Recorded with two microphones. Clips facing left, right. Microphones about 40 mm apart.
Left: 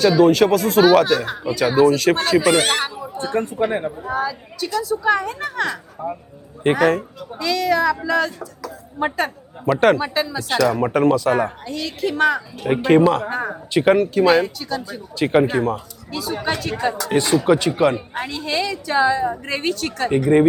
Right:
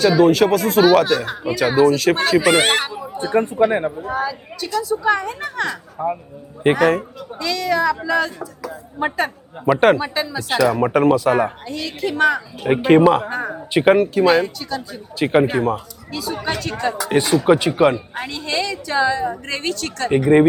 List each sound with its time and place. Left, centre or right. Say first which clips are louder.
0.0 s a woman's voice: even; centre
2.6 s speech: right 2 dB; right
2.8 s a sound: left 1 dB; centre
3.1 s speech: right 4 dB; centre
3.9 s a woman's voice: even; centre
12.6 s speech: right 2 dB; centre
13.2 s a woman's voice: even; centre
13.7 s a woman's voice: right 1 dB; centre
17.0 s speech: right 2 dB; centre
18.2 s a woman's voice: even; centre
20.1 s speech: right 2 dB; centre